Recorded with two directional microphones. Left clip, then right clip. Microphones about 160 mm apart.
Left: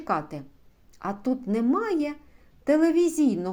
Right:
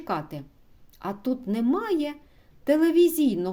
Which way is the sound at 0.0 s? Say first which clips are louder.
Left 2 dB; 25° right (ahead or behind).